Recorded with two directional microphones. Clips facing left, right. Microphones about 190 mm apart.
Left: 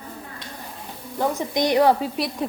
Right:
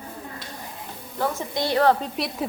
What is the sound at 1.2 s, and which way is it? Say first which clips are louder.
Speech: left 3 dB; 15° left (ahead or behind).